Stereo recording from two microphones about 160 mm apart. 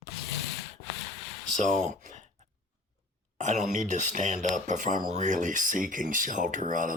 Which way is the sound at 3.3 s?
50° right (ahead or behind).